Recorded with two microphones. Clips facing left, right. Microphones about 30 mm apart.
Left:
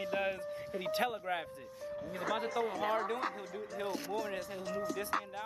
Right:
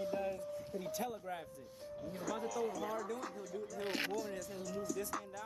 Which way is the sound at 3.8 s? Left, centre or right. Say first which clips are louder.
Right 1 dB; right.